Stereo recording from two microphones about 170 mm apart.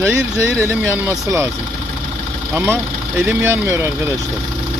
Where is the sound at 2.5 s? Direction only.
15° right (ahead or behind).